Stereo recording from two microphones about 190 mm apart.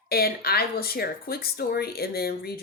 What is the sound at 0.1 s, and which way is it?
Speech, 55° left (ahead or behind).